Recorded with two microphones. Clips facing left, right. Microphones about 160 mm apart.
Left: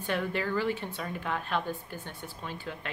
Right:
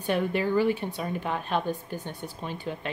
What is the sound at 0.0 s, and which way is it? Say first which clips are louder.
Speech: right 5 dB; 15° right (ahead or behind).